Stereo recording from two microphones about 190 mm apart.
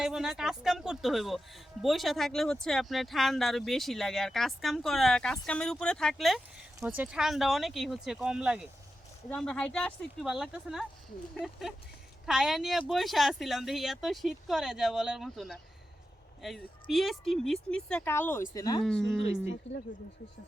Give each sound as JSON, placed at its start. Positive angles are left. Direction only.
{"t": 0.0, "sound": "speech", "side_deg": 0}
{"t": 16.9, "sound": "speech", "side_deg": 0}
{"t": 18.9, "sound": "speech", "side_deg": 5}